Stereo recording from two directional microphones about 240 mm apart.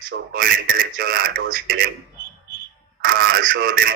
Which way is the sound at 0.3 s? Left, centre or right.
Right.